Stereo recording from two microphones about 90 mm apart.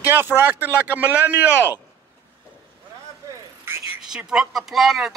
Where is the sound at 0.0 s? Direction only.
25° right (ahead or behind).